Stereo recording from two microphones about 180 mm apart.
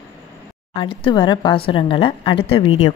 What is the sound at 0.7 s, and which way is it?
A woman's voice, 25° left (ahead or behind).